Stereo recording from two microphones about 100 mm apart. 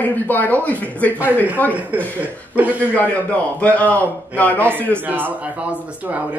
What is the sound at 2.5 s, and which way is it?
Speech, 15° right (ahead or behind).